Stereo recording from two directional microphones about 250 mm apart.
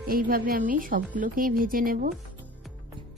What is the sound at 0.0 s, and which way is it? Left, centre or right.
A woman's voice, right.